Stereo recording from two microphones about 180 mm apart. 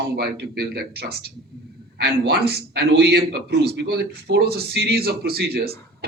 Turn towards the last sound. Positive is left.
turn(degrees=-60)  # may be behind; listen again after turning